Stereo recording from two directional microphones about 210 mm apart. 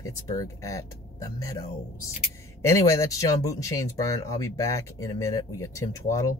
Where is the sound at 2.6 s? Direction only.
15° left (ahead or behind).